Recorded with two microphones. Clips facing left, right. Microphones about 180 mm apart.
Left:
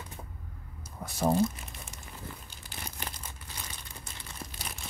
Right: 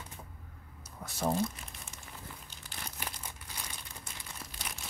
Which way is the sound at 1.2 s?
15° left (ahead or behind).